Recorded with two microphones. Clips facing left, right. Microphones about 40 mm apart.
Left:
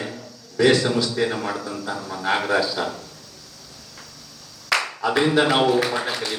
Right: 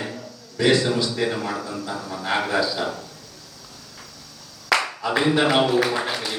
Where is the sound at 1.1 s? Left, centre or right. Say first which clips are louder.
Left 1 dB; centre.